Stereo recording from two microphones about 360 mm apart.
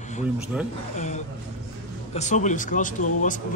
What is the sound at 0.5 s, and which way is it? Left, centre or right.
Speech, centre.